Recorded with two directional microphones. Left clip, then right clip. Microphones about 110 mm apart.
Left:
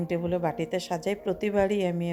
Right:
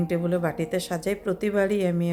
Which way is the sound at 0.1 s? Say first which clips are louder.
Right 1 dB; 30° left (ahead or behind).